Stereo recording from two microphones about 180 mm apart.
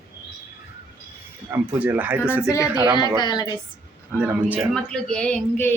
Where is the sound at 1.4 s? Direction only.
10° right (ahead or behind).